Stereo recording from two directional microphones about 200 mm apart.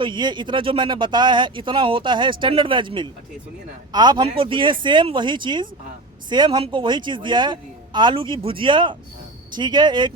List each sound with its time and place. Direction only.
0.0 s speech: 20° right (ahead or behind)